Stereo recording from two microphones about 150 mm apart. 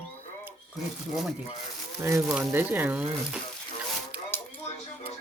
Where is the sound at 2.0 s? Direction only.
20° right (ahead or behind).